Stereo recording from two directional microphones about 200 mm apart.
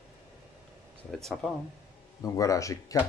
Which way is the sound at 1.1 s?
Centre (ahead or behind).